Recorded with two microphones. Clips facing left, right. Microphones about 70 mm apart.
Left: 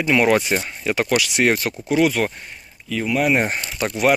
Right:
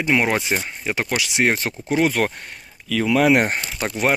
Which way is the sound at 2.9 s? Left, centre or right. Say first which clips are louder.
Right 3 dB; right.